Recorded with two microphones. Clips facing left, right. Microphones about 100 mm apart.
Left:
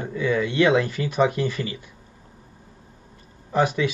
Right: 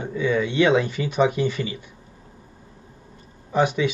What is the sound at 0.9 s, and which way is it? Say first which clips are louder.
Speech: right 1 dB; 45° left (ahead or behind).